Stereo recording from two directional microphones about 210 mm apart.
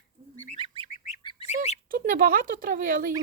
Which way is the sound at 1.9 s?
40° right (ahead or behind).